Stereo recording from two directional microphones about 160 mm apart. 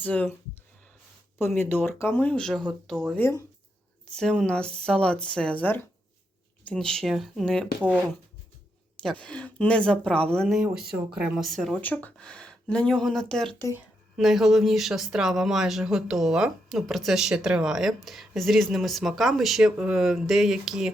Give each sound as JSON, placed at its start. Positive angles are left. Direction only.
{"t": 0.0, "sound": "speech", "side_deg": 10}
{"t": 1.4, "sound": "speech", "side_deg": 15}
{"t": 3.2, "sound": "speech", "side_deg": 15}
{"t": 4.0, "sound": "speech", "side_deg": 5}
{"t": 7.8, "sound": "speech", "side_deg": -10}
{"t": 9.0, "sound": "speech", "side_deg": 5}